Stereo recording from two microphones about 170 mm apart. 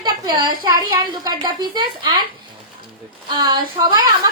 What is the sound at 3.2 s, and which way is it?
Speech, 25° right (ahead or behind).